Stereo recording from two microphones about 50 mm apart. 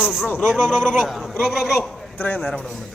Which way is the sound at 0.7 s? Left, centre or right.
Centre.